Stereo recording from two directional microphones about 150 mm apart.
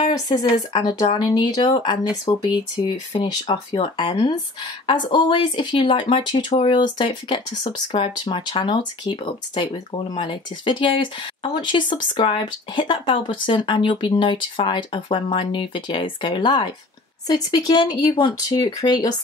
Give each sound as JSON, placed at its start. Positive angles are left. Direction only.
{"t": 0.0, "sound": "speech", "side_deg": 30}